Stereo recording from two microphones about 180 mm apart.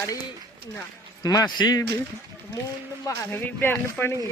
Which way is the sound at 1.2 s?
20° left (ahead or behind).